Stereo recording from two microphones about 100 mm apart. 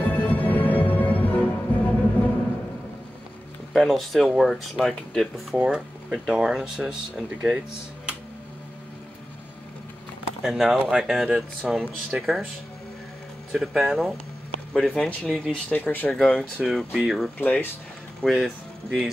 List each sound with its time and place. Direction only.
0.0 s music: 15° left (ahead or behind)
3.7 s speech: centre (ahead or behind)
5.6 s speech: 10° right (ahead or behind)
10.4 s speech: 5° right (ahead or behind)
13.5 s speech: centre (ahead or behind)
15.7 s speech: 20° left (ahead or behind)
16.1 s speech: 5° left (ahead or behind)
17.4 s speech: 20° left (ahead or behind)
18.2 s speech: centre (ahead or behind)